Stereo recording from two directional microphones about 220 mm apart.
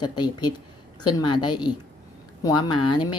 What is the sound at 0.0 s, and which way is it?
A woman's voice, 20° left (ahead or behind).